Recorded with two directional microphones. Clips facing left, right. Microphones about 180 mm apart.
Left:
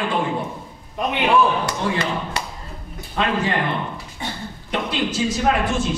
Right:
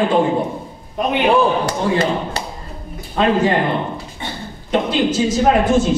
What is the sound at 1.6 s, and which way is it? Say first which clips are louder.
A woman's voice: right 5 dB; 30° right (ahead or behind).